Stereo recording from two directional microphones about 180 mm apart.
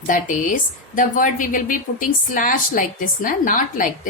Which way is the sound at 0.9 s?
45° left (ahead or behind).